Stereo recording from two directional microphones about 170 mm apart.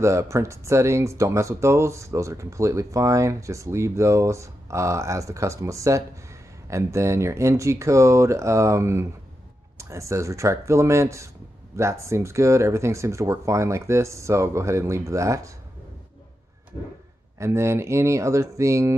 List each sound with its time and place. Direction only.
0.0 s speech: 15° right (ahead or behind)
17.4 s speech: 15° right (ahead or behind)